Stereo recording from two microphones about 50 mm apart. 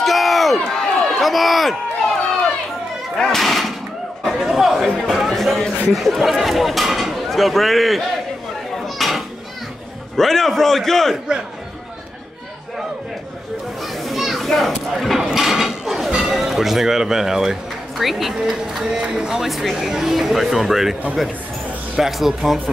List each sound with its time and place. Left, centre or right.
0.0 s a sound: centre
3.2 s speech: centre
4.2 s a sound: centre
5.1 s speech: centre
8.7 s children playing: centre
10.1 s a man's voice: centre
13.9 s children playing: centre
14.5 s speech: centre
15.1 s mechanisms: centre
16.1 s music: centre
16.3 s speech: centre
22.0 s speech: centre